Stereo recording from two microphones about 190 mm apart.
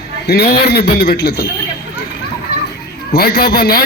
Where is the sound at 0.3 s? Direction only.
60° left (ahead or behind).